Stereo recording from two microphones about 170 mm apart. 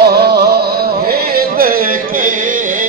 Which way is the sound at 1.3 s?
60° right (ahead or behind).